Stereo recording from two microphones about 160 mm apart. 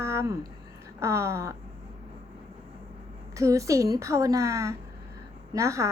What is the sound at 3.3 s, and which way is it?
A woman's voice, 20° right (ahead or behind).